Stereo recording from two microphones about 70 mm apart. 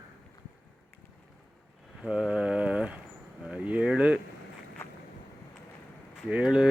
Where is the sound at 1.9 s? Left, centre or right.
Centre.